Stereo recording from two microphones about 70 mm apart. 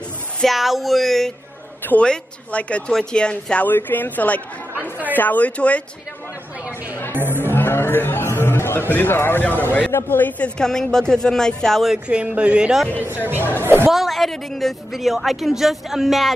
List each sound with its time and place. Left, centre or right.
0.4 s a woman's voice: centre
2.0 s speech: centre
3.6 s speech: left
7.2 s speech: right
7.4 s speech: left
10.6 s speech: centre
11.9 s speech: centre
13.4 s speech: left
13.8 s a woman's voice: centre